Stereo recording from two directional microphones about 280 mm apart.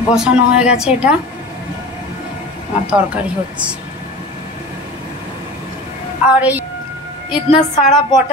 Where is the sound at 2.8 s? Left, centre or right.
Centre.